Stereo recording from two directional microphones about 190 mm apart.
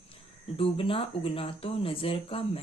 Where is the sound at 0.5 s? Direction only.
30° left (ahead or behind).